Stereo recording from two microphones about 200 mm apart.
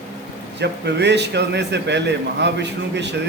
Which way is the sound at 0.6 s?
60° right (ahead or behind).